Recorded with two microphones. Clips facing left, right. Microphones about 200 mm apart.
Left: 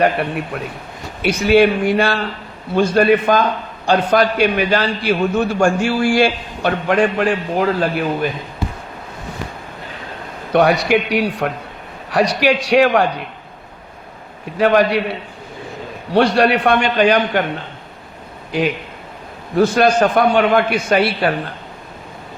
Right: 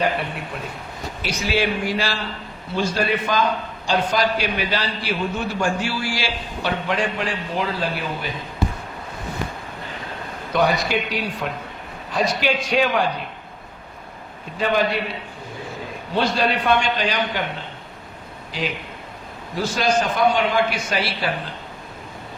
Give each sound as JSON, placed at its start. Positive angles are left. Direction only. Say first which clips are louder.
{"t": 0.0, "sound": "a man's voice", "louder": "left 6 dB", "side_deg": 60}
{"t": 10.5, "sound": "a man's voice", "louder": "left 7 dB", "side_deg": 75}
{"t": 12.1, "sound": "a man's voice", "louder": "left 6 dB", "side_deg": 85}
{"t": 14.6, "sound": "a man's voice", "louder": "left 7 dB", "side_deg": 70}
{"t": 16.1, "sound": "a man's voice", "louder": "left 8 dB", "side_deg": 75}
{"t": 18.5, "sound": "a man's voice", "louder": "left 9 dB", "side_deg": 55}